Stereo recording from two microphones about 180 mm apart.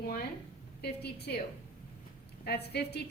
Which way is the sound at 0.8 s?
65° left (ahead or behind).